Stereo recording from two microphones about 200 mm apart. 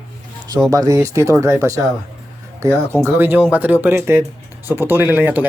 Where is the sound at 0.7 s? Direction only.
15° right (ahead or behind).